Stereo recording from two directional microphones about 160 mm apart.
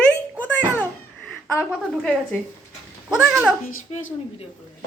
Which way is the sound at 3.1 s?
5° right (ahead or behind).